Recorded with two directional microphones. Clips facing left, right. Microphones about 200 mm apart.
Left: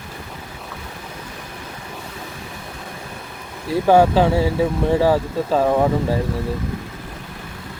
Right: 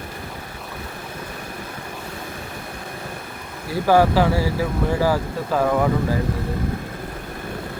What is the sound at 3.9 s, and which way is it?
Speech, 20° left (ahead or behind).